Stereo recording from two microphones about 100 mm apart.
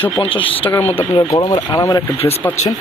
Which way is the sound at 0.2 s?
65° left (ahead or behind).